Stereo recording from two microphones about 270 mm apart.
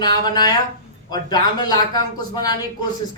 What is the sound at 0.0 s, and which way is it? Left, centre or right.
Speech, centre.